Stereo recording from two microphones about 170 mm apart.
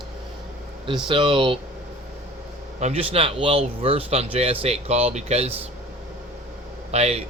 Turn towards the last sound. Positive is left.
turn(degrees=-40)  # may be behind; listen again after turning